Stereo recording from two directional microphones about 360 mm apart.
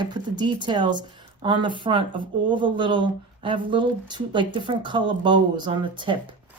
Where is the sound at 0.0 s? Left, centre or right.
Centre.